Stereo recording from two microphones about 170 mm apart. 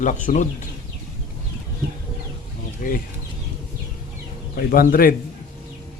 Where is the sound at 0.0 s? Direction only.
45° left (ahead or behind).